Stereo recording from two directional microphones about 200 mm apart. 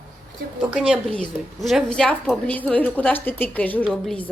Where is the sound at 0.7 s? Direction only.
5° right (ahead or behind).